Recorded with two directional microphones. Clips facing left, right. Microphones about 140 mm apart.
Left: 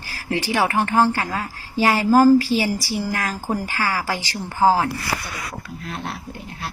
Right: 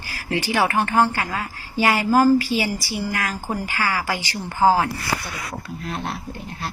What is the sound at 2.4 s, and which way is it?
A woman's voice, centre (ahead or behind).